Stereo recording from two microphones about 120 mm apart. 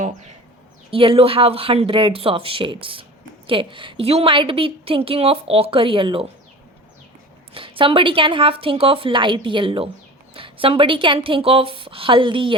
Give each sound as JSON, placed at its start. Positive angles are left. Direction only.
{"t": 0.9, "sound": "speech", "side_deg": -50}
{"t": 7.5, "sound": "speech", "side_deg": -45}